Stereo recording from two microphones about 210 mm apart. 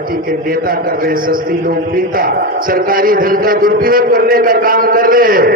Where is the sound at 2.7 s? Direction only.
40° right (ahead or behind).